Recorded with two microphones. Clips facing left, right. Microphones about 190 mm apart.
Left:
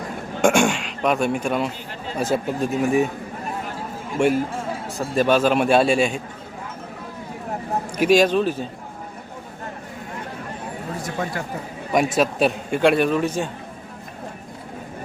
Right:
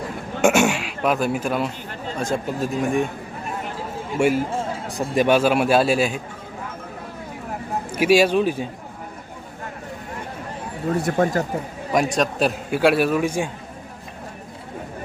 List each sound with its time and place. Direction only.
0.4 s a sound: 5° right (ahead or behind)
2.1 s a man's voice: 5° left (ahead or behind)
4.2 s a man's voice: 10° right (ahead or behind)
7.9 s speech: 5° right (ahead or behind)
11.0 s speech: 45° right (ahead or behind)
11.9 s a man's voice: centre (ahead or behind)